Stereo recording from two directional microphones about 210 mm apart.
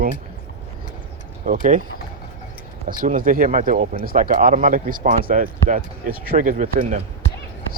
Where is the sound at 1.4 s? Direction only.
40° right (ahead or behind).